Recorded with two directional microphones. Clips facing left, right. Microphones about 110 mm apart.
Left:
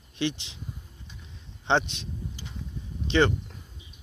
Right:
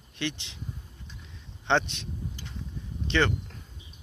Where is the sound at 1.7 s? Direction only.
15° left (ahead or behind).